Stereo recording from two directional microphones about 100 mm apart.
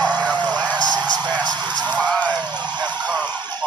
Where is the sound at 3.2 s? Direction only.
45° right (ahead or behind).